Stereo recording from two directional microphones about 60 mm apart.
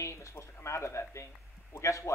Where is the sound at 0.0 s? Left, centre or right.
Left.